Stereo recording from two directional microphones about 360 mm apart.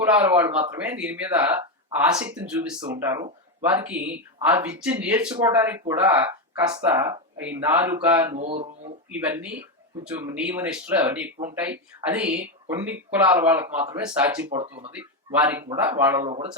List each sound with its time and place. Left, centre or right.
0.0 s speech: centre
8.4 s speech: centre
9.1 s speech: centre
16.2 s speech: centre